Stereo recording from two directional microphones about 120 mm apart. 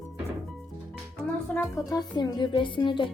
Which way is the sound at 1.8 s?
35° left (ahead or behind).